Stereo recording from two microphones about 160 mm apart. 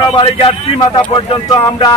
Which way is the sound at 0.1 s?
35° left (ahead or behind).